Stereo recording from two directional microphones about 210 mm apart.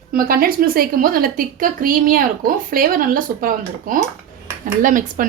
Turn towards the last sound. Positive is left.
turn(degrees=-40)  # may be behind; listen again after turning